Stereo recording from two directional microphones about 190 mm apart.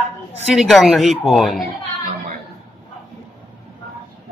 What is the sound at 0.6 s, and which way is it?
Speech, centre (ahead or behind).